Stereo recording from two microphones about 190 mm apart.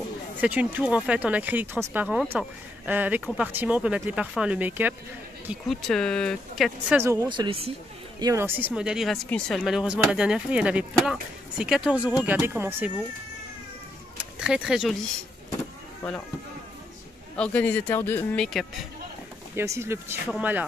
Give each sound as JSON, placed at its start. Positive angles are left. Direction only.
{"t": 0.4, "sound": "speech", "side_deg": -10}
{"t": 5.5, "sound": "speech", "side_deg": 0}
{"t": 7.0, "sound": "speech", "side_deg": -15}
{"t": 8.2, "sound": "speech", "side_deg": -15}
{"t": 14.4, "sound": "speech", "side_deg": -5}
{"t": 17.4, "sound": "a man's voice", "side_deg": 10}
{"t": 19.5, "sound": "speech", "side_deg": -15}